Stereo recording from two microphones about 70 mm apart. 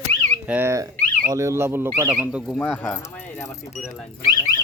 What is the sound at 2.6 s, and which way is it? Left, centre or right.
Speech, left.